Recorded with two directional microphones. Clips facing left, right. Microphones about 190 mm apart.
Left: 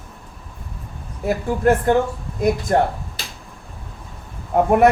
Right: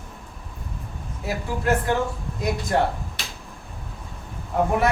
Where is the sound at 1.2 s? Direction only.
50° left (ahead or behind).